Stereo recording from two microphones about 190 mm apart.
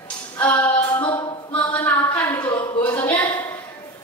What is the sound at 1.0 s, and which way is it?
A capella, 20° left (ahead or behind).